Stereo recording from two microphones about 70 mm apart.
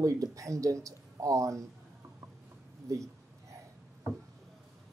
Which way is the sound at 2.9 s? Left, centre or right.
Right.